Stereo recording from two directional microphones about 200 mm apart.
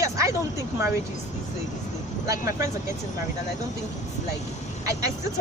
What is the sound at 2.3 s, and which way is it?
Speech, 15° right (ahead or behind).